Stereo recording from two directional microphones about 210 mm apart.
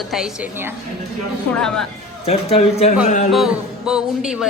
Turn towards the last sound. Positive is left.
turn(degrees=-5)  # may be behind; listen again after turning